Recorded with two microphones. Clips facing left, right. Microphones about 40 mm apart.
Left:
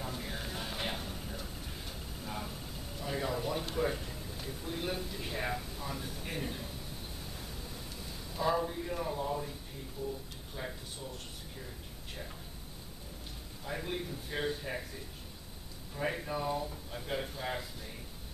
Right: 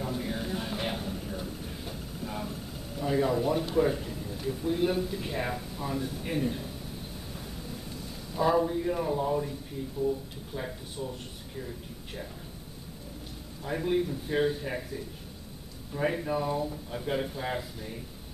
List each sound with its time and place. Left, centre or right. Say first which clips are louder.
0.0 s a sound: right 7 dB; centre
3.0 s a man's voice: right 9 dB; centre
8.4 s a man's voice: right 7 dB; centre
13.7 s a man's voice: right 10 dB; centre
15.9 s a man's voice: right 6 dB; centre